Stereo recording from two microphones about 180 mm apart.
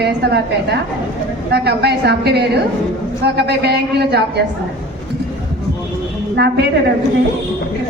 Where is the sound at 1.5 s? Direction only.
65° right (ahead or behind).